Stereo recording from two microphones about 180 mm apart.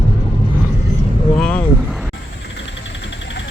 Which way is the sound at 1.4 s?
5° left (ahead or behind).